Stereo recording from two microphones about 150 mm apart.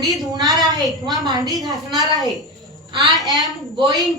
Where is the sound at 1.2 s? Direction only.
25° right (ahead or behind).